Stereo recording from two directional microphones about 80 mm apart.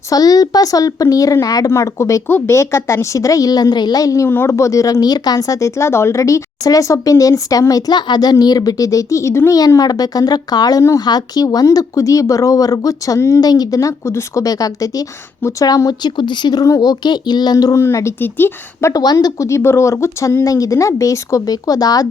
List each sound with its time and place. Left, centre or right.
0.1 s speech: left
2.2 s speech: left
4.3 s speech: left
9.6 s speech: left
13.4 s speech: left
15.4 s speech: left
15.6 s speech: left
16.6 s speech: left
17.7 s speech: left
18.9 s speech: left